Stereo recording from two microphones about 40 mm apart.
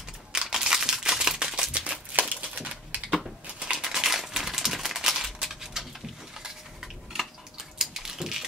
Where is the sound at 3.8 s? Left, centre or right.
Centre.